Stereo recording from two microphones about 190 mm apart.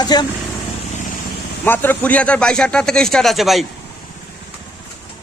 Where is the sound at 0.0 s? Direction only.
20° left (ahead or behind).